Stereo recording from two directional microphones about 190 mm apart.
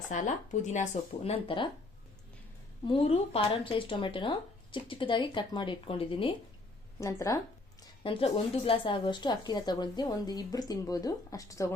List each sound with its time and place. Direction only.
0.1 s speech: 40° left (ahead or behind)
2.8 s speech: 30° left (ahead or behind)
7.0 s speech: 15° left (ahead or behind)
7.8 s speech: 25° left (ahead or behind)